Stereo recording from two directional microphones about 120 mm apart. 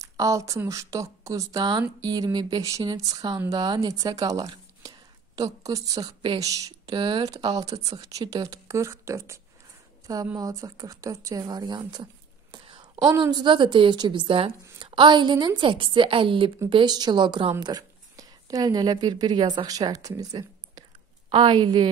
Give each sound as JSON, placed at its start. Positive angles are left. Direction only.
{"t": 0.0, "sound": "speech", "side_deg": -25}
{"t": 11.9, "sound": "a sound", "side_deg": -45}
{"t": 13.1, "sound": "a woman's voice", "side_deg": -35}